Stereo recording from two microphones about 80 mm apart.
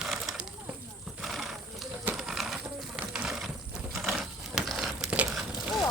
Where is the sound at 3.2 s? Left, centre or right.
Centre.